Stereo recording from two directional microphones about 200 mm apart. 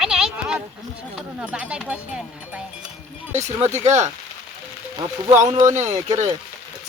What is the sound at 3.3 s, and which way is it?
Speech, 35° right (ahead or behind).